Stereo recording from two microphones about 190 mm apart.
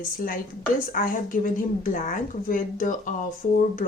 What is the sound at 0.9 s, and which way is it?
Speech, 45° left (ahead or behind).